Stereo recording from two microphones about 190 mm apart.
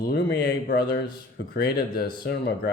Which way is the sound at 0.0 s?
55° left (ahead or behind).